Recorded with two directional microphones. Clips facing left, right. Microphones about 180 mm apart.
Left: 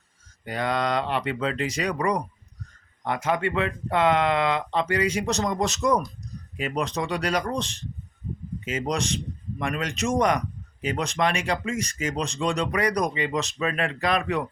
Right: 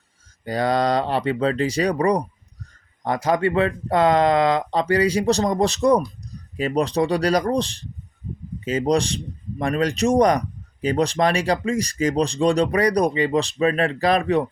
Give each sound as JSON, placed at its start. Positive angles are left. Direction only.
{"t": 0.4, "sound": "speech", "side_deg": -35}